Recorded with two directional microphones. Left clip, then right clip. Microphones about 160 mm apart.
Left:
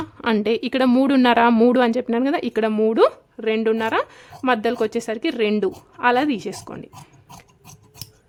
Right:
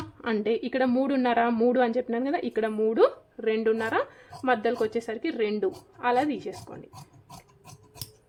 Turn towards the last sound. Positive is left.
turn(degrees=65)  # may be behind; listen again after turning